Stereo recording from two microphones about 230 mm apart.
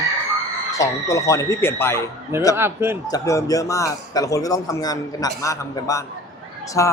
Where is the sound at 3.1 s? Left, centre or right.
Centre.